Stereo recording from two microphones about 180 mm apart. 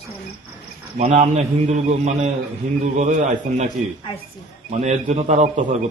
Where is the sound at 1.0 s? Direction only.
35° right (ahead or behind).